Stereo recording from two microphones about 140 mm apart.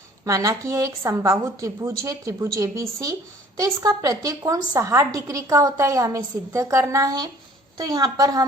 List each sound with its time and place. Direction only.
0.3 s a woman's voice: 20° right (ahead or behind)